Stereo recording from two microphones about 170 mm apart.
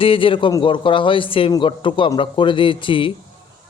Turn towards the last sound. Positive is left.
turn(degrees=30)  # may be behind; listen again after turning